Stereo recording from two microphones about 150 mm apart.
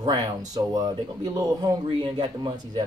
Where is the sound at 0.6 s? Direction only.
25° right (ahead or behind).